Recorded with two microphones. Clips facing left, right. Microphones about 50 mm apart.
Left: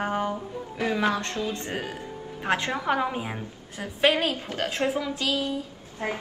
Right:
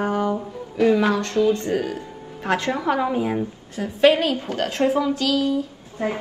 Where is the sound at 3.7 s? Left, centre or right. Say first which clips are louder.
Right 6 dB; left.